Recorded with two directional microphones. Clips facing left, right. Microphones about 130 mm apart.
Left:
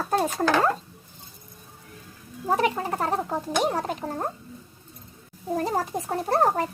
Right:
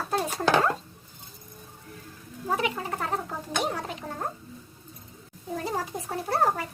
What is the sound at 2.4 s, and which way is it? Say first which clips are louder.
Speech: left 5 dB; 40° left (ahead or behind).